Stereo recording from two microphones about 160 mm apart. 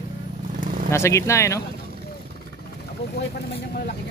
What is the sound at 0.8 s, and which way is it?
Speech, 15° left (ahead or behind).